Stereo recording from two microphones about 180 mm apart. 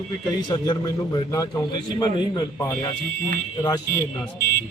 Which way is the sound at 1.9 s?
25° left (ahead or behind).